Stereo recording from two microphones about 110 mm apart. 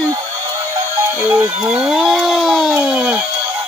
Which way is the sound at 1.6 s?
10° right (ahead or behind).